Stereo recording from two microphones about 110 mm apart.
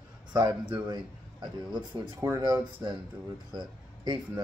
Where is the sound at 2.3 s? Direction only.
40° right (ahead or behind).